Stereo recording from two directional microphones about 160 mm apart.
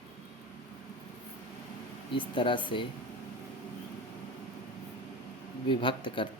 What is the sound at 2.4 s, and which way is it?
Speech, 30° left (ahead or behind).